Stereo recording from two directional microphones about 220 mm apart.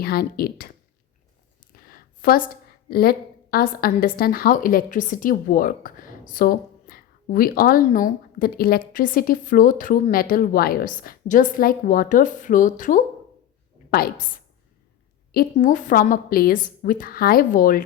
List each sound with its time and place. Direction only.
0.0 s speech: 45° left (ahead or behind)
1.7 s a sound: 40° left (ahead or behind)
2.9 s a woman's voice: 45° left (ahead or behind)